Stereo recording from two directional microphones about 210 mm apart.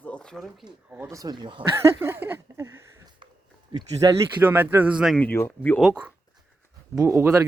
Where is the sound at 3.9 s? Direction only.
15° right (ahead or behind).